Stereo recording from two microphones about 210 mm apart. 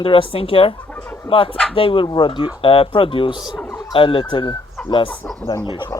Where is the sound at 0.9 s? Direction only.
5° left (ahead or behind).